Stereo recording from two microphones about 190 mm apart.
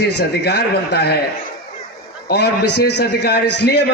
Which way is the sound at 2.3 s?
60° left (ahead or behind).